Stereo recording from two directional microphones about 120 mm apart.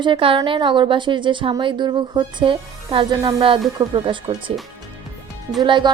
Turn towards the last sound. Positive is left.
turn(degrees=-40)  # may be behind; listen again after turning